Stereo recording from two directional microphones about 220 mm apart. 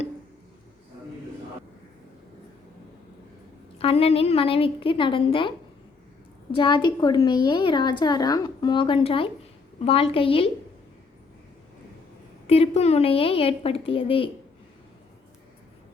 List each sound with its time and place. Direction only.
3.8 s a woman's voice: 25° left (ahead or behind)
12.5 s a woman's voice: 30° left (ahead or behind)